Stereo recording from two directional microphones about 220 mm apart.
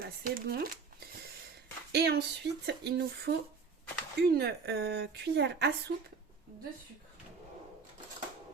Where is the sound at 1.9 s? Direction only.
50° right (ahead or behind).